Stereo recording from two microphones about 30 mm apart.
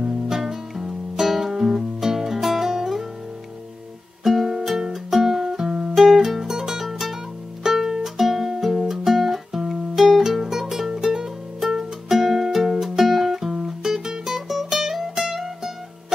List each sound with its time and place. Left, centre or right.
0.0 s music: centre
4.2 s music: centre
6.8 s music: centre